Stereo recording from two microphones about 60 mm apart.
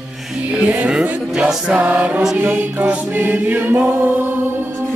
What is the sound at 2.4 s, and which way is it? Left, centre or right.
A capella, right.